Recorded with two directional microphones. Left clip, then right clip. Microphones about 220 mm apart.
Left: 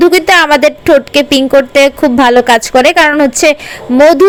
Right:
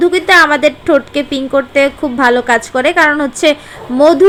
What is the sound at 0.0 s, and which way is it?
A woman's voice, 35° left (ahead or behind).